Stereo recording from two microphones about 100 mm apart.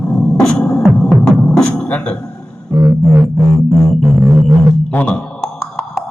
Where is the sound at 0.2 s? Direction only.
5° left (ahead or behind).